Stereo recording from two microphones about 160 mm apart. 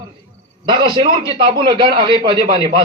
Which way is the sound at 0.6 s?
30° right (ahead or behind).